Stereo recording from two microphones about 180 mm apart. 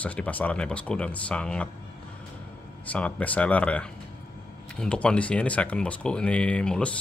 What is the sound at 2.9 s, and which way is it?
Speech, 10° left (ahead or behind).